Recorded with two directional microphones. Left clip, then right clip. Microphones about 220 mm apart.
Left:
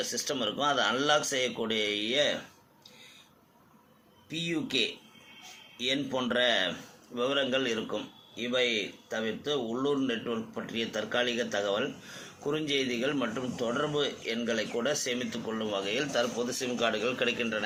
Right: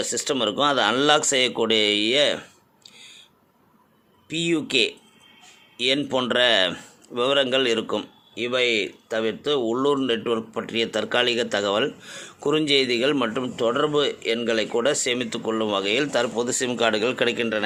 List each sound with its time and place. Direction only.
0.1 s a man's voice: 50° right (ahead or behind)
4.3 s a man's voice: 50° right (ahead or behind)